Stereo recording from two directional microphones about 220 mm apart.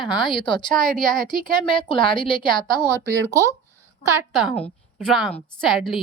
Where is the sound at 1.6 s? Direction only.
20° left (ahead or behind).